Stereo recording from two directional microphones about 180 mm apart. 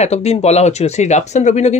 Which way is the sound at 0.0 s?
35° left (ahead or behind).